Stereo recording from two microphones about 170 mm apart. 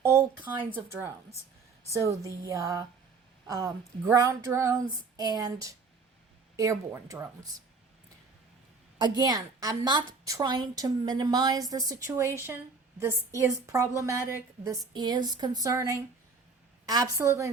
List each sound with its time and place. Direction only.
0.0 s a woman's voice: 15° right (ahead or behind)
9.0 s a woman's voice: 25° right (ahead or behind)